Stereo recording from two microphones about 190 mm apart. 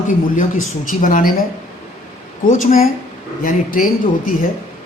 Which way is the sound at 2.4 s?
45° left (ahead or behind).